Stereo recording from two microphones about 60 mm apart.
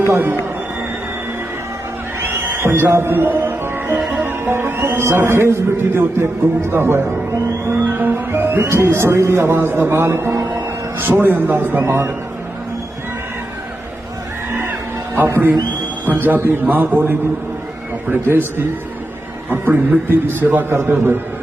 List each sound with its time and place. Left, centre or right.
2.2 s speech: right
7.9 s music: right
9.1 s a man's voice: right
11.1 s a man's voice: right
11.8 s a man's voice: right
15.1 s a man's voice: right